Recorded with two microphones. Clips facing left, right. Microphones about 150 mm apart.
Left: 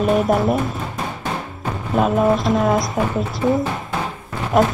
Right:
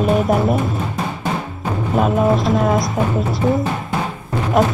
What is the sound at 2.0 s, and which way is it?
Speech, centre (ahead or behind).